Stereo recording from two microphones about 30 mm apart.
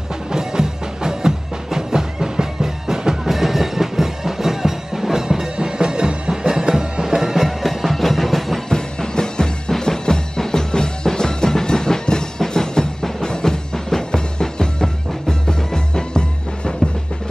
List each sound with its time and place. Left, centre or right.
0.3 s music: right
5.7 s music: right
7.3 s music: centre
8.6 s music: left